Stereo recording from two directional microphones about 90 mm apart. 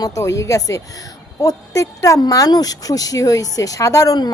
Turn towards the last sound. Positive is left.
turn(degrees=40)  # may be behind; listen again after turning